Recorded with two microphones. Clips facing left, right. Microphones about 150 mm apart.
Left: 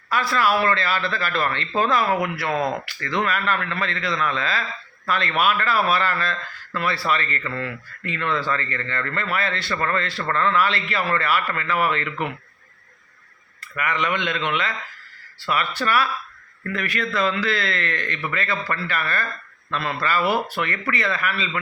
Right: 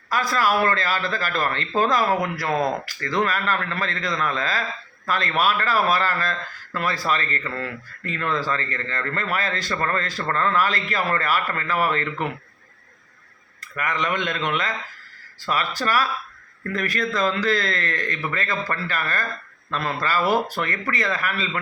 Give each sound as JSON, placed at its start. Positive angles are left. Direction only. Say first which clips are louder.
{"t": 0.1, "sound": "speech", "louder": "left 1 dB", "side_deg": -40}
{"t": 13.6, "sound": "speech", "louder": "left 1 dB", "side_deg": -35}